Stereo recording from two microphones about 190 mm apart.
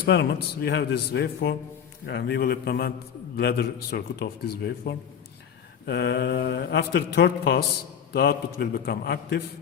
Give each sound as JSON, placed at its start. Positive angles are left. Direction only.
{"t": 0.0, "sound": "speech", "side_deg": 60}